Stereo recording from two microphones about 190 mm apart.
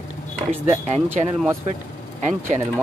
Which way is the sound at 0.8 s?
35° right (ahead or behind).